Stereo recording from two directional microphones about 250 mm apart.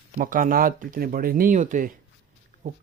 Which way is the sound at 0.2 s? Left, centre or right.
Right.